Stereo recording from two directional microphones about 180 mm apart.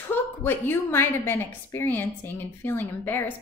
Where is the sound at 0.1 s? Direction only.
10° left (ahead or behind).